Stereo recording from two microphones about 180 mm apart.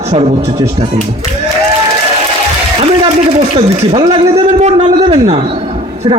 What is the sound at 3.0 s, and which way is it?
A man's voice, 35° right (ahead or behind).